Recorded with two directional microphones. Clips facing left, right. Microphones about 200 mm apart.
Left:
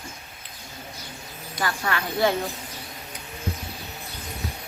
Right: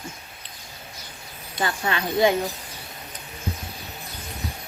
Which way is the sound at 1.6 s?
20° right (ahead or behind).